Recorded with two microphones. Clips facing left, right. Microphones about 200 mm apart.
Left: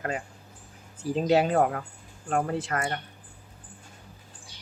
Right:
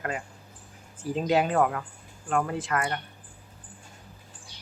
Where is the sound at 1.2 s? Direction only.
40° left (ahead or behind).